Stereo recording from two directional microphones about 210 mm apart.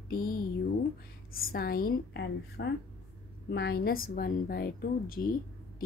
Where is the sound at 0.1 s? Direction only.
45° left (ahead or behind).